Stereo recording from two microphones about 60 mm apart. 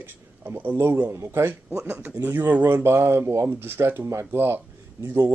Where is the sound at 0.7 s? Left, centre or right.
Right.